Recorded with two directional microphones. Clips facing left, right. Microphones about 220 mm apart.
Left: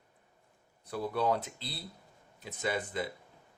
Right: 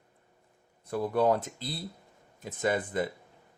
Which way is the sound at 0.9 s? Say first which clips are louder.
Right 5 dB; 50° right (ahead or behind).